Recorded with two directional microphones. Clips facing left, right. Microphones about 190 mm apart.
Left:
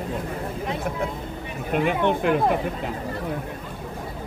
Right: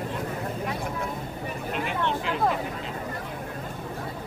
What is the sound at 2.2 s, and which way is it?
Speech, 55° left (ahead or behind).